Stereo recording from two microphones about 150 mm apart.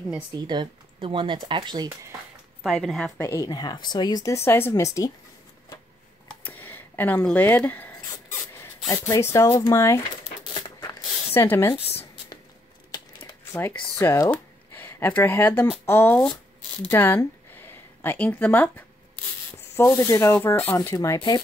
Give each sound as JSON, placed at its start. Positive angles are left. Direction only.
{"t": 0.3, "sound": "speech", "side_deg": -30}
{"t": 2.6, "sound": "a woman's voice", "side_deg": 0}
{"t": 3.2, "sound": "speech", "side_deg": 15}
{"t": 3.4, "sound": "speech", "side_deg": 30}
{"t": 6.4, "sound": "a sound", "side_deg": 15}
{"t": 8.9, "sound": "speech", "side_deg": 25}
{"t": 11.3, "sound": "speech", "side_deg": 15}
{"t": 13.3, "sound": "speech", "side_deg": 15}
{"t": 14.3, "sound": "a sound", "side_deg": 15}
{"t": 15.8, "sound": "speech", "side_deg": 15}